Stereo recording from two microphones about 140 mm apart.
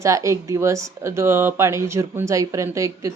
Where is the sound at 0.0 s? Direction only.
20° right (ahead or behind).